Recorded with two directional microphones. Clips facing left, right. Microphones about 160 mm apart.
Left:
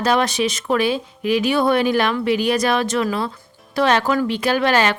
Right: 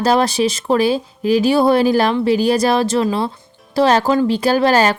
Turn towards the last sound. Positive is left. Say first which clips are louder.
# right 4 dB
turn(degrees=-40)  # may be behind; listen again after turning